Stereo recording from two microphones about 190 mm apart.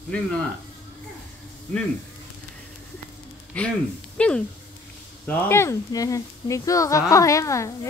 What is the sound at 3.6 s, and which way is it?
A woman's voice, 5° left (ahead or behind).